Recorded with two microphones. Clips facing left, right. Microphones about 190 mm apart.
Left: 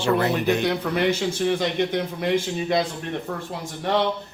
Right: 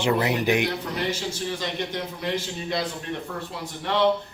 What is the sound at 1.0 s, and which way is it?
A man's voice, 55° left (ahead or behind).